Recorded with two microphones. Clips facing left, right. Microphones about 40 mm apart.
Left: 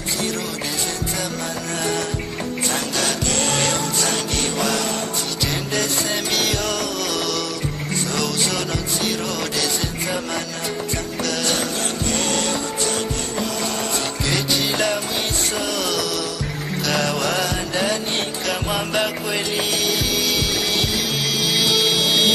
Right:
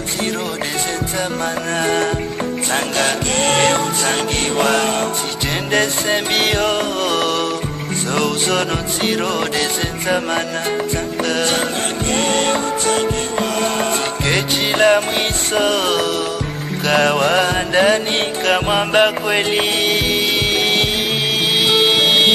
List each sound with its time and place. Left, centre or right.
2.7 s music: right
12.1 s music: right
21.5 s music: right